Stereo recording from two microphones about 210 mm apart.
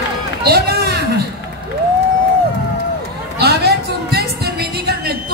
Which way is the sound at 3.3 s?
50° right (ahead or behind).